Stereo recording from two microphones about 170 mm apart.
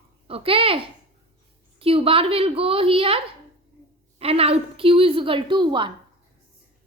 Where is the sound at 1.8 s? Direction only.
35° right (ahead or behind).